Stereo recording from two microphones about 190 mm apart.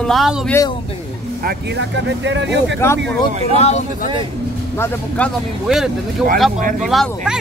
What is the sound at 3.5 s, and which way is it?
Speech, 35° left (ahead or behind).